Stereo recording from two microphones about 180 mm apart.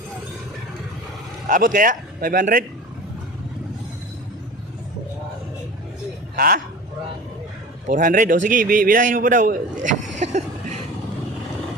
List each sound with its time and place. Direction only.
1.5 s a man's voice: 50° right (ahead or behind)
6.3 s speech: 55° right (ahead or behind)
7.9 s a man's voice: 45° right (ahead or behind)